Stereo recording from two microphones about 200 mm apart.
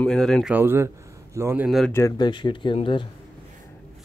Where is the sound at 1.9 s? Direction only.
15° left (ahead or behind).